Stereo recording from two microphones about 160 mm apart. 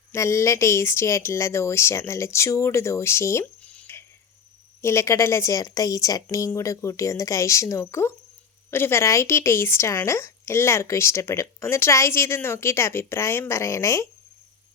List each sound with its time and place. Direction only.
0.1 s speech: 15° left (ahead or behind)
3.7 s a sound: 10° left (ahead or behind)
4.8 s speech: 15° left (ahead or behind)